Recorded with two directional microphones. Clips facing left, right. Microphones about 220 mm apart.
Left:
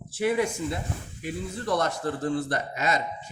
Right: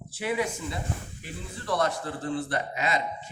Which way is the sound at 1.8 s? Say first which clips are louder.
Left 1 dB; 45° left (ahead or behind).